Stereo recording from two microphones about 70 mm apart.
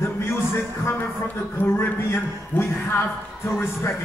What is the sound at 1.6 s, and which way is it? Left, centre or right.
A man's voice, left.